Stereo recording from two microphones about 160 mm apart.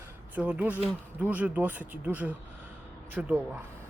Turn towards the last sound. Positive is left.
turn(degrees=-10)  # may be behind; listen again after turning